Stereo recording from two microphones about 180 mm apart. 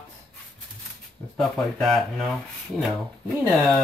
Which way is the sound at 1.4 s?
Centre (ahead or behind).